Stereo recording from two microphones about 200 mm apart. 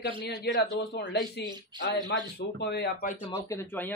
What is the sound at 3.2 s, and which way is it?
Speech, 25° left (ahead or behind).